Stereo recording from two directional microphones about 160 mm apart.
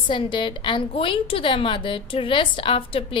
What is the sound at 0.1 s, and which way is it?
A woman's voice, 30° left (ahead or behind).